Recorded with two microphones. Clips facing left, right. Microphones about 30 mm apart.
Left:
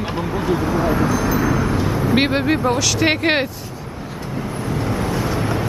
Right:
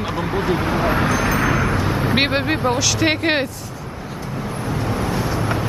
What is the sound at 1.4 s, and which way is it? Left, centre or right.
Vehicle, right.